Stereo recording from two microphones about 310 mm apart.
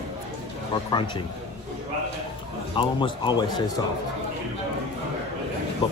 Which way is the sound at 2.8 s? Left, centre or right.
Centre.